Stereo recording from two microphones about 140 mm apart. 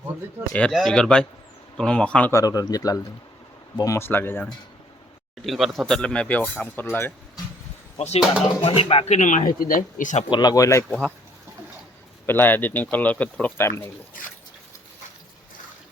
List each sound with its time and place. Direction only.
0.5 s speech: 5° left (ahead or behind)
2.3 s speech: 25° left (ahead or behind)
5.5 s speech: centre (ahead or behind); by 7.1 s 15° left (ahead or behind)
7.9 s speech: 50° left (ahead or behind)
10.2 s speech: 30° left (ahead or behind)
12.2 s speech: 15° left (ahead or behind)